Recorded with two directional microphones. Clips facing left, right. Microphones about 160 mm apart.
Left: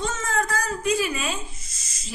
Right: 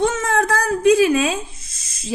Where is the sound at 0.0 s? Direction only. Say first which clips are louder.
Right 8 dB; 60° right (ahead or behind).